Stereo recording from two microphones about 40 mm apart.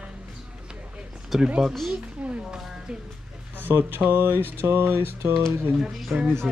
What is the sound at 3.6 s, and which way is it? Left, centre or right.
Speech, right.